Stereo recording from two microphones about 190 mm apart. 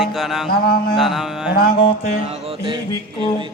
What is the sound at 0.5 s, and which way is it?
Mantra, 55° left (ahead or behind).